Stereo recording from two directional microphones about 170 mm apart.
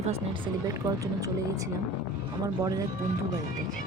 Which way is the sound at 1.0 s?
20° right (ahead or behind).